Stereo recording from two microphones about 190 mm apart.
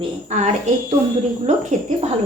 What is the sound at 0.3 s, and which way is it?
A woman's voice, 40° right (ahead or behind).